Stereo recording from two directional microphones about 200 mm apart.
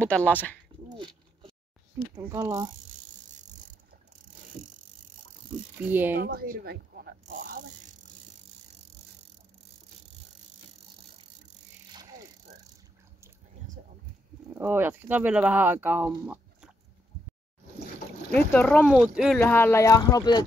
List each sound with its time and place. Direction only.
0.3 s speech: 10° left (ahead or behind)
0.9 s a sound: 25° right (ahead or behind)
2.1 s speech: 15° right (ahead or behind)
3.3 s ratchet: 40° right (ahead or behind)
4.1 s vehicle: 40° right (ahead or behind)
5.9 s speech: 10° right (ahead or behind)
6.2 s speech: 45° right (ahead or behind)
7.2 s a sound: 40° right (ahead or behind)
11.9 s bicycle: 20° right (ahead or behind)
14.5 s speech: 10° right (ahead or behind)
18.3 s speech: 5° left (ahead or behind)
19.4 s speech: 10° left (ahead or behind)